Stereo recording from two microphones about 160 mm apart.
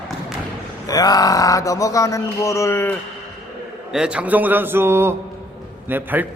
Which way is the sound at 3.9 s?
5° right (ahead or behind).